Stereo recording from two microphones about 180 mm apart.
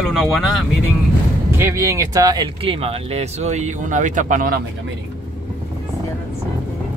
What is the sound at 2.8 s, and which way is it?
Speech, 35° right (ahead or behind).